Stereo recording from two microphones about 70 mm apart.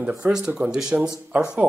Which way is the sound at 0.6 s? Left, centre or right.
Centre.